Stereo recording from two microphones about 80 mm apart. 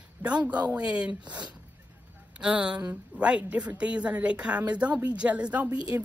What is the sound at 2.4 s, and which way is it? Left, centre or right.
A child's voice, centre.